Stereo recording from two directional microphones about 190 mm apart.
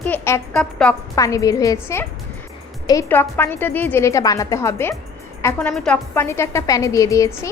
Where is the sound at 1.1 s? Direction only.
15° left (ahead or behind).